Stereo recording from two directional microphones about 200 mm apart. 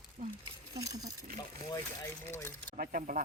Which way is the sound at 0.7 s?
15° right (ahead or behind).